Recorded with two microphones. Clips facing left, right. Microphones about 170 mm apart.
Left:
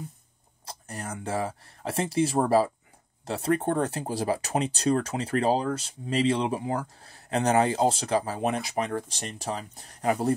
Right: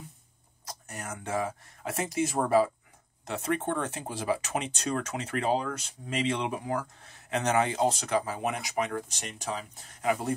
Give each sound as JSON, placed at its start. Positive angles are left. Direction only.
{"t": 0.7, "sound": "speech", "side_deg": 30}